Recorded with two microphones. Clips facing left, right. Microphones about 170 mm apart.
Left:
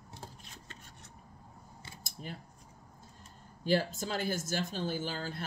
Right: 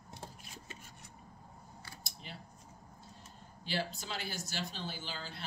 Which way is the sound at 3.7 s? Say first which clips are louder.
Left 8 dB; 50° left (ahead or behind).